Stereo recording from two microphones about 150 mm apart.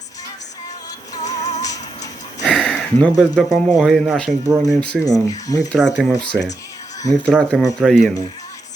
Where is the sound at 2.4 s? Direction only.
5° right (ahead or behind).